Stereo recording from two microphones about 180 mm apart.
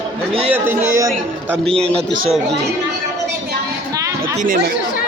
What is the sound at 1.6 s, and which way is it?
Speech, 5° left (ahead or behind).